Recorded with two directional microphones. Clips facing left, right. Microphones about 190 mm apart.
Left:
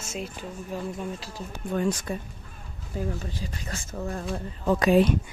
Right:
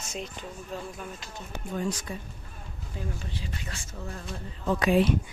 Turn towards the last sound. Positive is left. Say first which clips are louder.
# left 3 dB
turn(degrees=40)  # may be behind; listen again after turning